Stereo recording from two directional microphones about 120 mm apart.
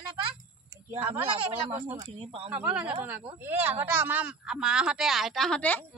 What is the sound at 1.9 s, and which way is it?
Speech, 50° right (ahead or behind).